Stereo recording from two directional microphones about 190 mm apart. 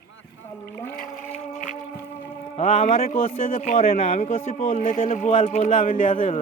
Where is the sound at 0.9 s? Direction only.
45° left (ahead or behind).